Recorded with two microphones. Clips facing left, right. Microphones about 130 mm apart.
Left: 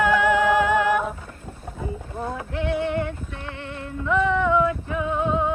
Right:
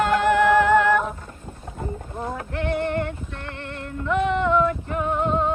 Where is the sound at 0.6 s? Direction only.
55° right (ahead or behind).